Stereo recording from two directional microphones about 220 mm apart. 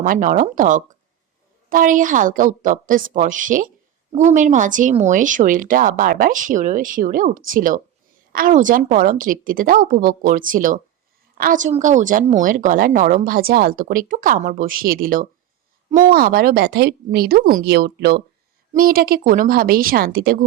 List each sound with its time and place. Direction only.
0.0 s a woman's voice: 40° right (ahead or behind)